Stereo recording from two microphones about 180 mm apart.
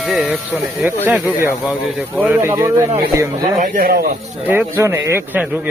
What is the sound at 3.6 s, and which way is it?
Speech, 50° right (ahead or behind).